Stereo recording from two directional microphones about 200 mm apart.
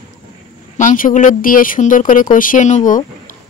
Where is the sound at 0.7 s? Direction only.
40° left (ahead or behind).